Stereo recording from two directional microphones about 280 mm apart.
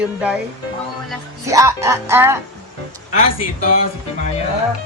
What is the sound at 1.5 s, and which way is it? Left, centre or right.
Speech, centre.